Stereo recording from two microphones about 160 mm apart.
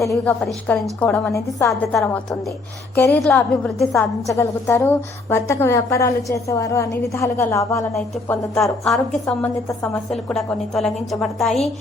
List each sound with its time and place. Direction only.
0.0 s a woman's voice: centre (ahead or behind)
1.3 s a woman's voice: 20° left (ahead or behind)
1.9 s a woman's voice: centre (ahead or behind)
3.9 s a woman's voice: 20° left (ahead or behind)
7.9 s a woman's voice: centre (ahead or behind)
10.1 s a woman's voice: centre (ahead or behind)